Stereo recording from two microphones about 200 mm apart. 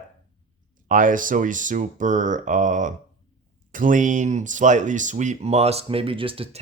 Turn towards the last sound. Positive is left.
turn(degrees=-25)  # may be behind; listen again after turning